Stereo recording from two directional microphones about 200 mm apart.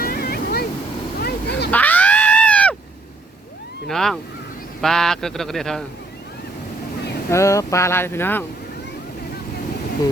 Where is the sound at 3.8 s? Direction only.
Centre (ahead or behind).